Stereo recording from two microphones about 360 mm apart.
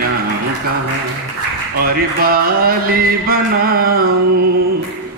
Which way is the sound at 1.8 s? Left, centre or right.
Right.